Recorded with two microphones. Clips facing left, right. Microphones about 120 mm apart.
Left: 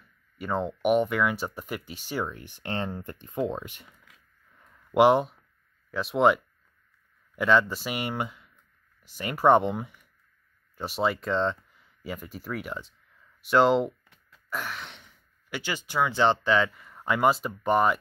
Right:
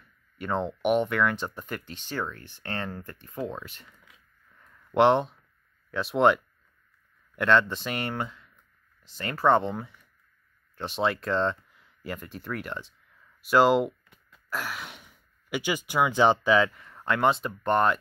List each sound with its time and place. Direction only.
0.4 s speech: centre (ahead or behind)
4.6 s a sound: 10° left (ahead or behind)
5.9 s speech: centre (ahead or behind)